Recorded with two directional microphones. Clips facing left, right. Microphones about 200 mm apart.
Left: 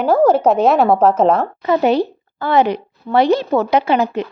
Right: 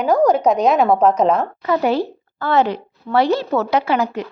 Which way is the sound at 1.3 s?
25° left (ahead or behind).